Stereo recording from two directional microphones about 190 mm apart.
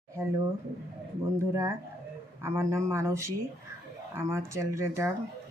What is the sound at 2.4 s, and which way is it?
Speech, 15° right (ahead or behind).